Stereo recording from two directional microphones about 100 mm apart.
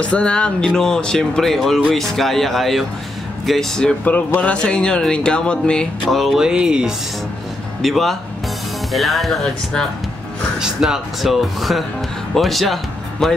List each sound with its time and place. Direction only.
0.0 s speech: 10° left (ahead or behind)
4.0 s speech: 15° left (ahead or behind); by 13.3 s centre (ahead or behind)